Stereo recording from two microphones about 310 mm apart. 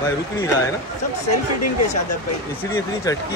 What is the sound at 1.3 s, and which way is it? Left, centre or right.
Speech, left.